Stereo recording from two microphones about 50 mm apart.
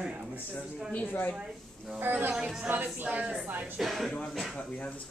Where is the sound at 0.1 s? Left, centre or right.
Right.